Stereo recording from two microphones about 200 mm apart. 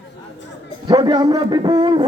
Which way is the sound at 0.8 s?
20° right (ahead or behind).